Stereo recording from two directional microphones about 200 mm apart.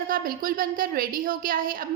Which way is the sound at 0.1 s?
45° right (ahead or behind).